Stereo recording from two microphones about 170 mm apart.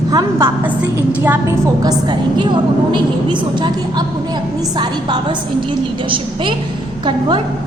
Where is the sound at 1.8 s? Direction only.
25° right (ahead or behind).